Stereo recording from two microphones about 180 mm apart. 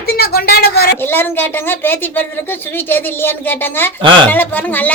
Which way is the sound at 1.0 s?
10° left (ahead or behind).